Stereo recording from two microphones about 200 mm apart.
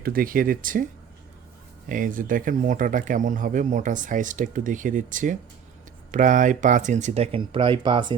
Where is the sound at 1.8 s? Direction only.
40° right (ahead or behind).